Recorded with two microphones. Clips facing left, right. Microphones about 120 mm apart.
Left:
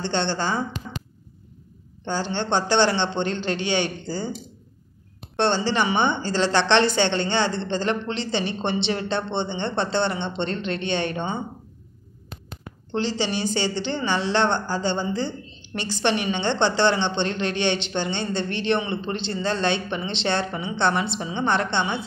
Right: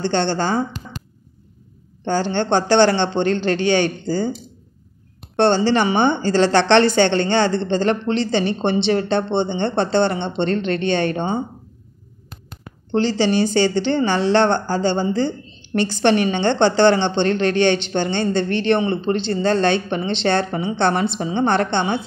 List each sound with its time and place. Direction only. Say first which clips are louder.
0.0 s speech: right 5 dB; 45° right (ahead or behind)
2.0 s speech: right 6 dB; 55° right (ahead or behind)
5.3 s speech: right 6 dB; 45° right (ahead or behind)
12.9 s speech: right 7 dB; 45° right (ahead or behind)